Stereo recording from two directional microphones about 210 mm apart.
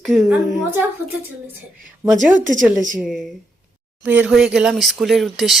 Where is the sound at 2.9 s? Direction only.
Centre (ahead or behind).